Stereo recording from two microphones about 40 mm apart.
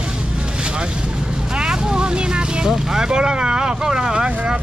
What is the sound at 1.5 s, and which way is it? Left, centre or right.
Vehicle, right.